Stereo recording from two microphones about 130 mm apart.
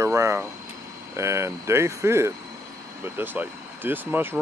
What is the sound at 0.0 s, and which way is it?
Speech, 20° right (ahead or behind).